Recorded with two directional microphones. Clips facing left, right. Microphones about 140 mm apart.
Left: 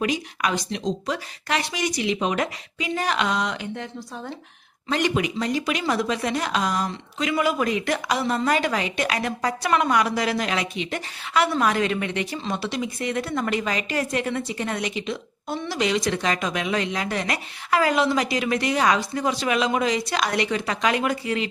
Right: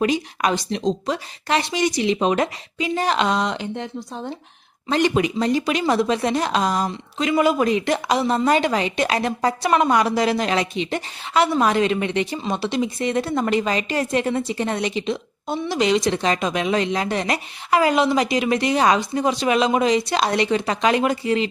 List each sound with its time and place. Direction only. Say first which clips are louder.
0.0 s a woman's voice: right 4 dB; 30° right (ahead or behind)